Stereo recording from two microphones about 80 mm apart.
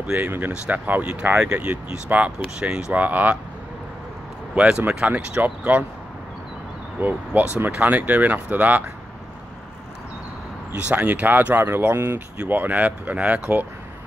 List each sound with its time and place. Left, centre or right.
0.0 s speech: centre
1.5 s speech: centre
4.6 s speech: centre
7.0 s speech: right
10.8 s speech: centre
12.4 s speech: centre